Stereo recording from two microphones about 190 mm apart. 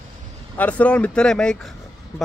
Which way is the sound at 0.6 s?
5° left (ahead or behind).